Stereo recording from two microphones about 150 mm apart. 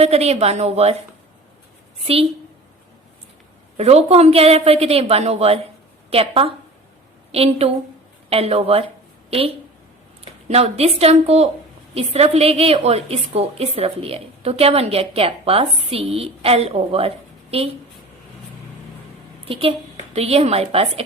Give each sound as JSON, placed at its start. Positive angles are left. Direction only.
{"t": 0.0, "sound": "a woman's voice", "side_deg": -45}
{"t": 2.1, "sound": "a woman's voice", "side_deg": -40}
{"t": 3.8, "sound": "a woman's voice", "side_deg": -45}
{"t": 19.5, "sound": "a woman's voice", "side_deg": -40}